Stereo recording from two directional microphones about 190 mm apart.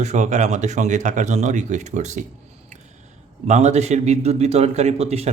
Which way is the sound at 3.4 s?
35° right (ahead or behind).